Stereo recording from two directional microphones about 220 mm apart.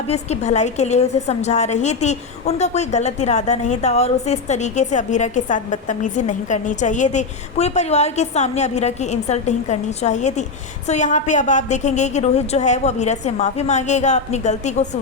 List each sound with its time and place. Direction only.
0.1 s a woman's voice: 30° left (ahead or behind)